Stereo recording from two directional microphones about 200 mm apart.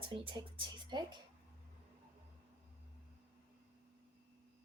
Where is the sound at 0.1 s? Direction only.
25° right (ahead or behind).